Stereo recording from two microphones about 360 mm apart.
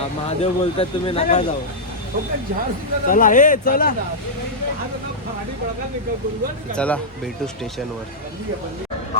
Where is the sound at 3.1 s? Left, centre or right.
Left.